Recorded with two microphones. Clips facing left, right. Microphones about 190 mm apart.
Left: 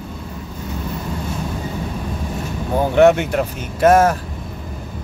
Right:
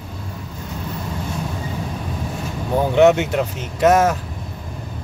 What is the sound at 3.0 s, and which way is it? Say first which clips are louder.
Speech: left 1 dB; 20° right (ahead or behind).